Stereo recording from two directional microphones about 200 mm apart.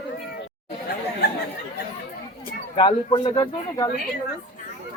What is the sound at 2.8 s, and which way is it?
Speech, 25° left (ahead or behind).